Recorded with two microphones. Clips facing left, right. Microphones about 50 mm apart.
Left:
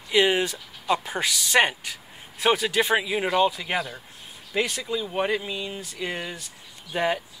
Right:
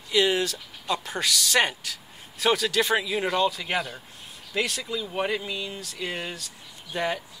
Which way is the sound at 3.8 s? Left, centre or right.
Centre.